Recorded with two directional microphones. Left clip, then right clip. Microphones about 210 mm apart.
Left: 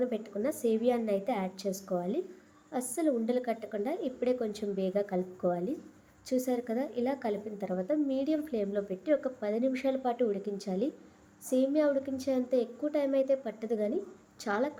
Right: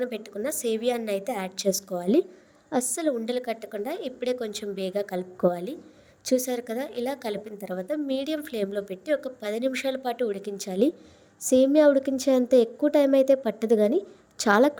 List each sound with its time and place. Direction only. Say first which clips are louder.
0.0 s a woman's voice: right 2 dB; 40° right (ahead or behind)